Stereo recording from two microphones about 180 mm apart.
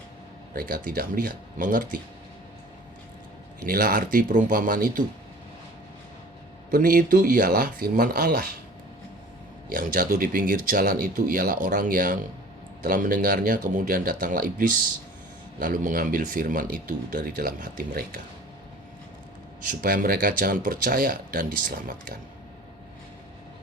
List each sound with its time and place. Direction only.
0.5 s speech: 55° right (ahead or behind)
3.7 s speech: 55° right (ahead or behind)
6.7 s speech: 55° right (ahead or behind)
9.6 s speech: 50° right (ahead or behind)
15.5 s speech: 50° right (ahead or behind)
19.8 s speech: 55° right (ahead or behind)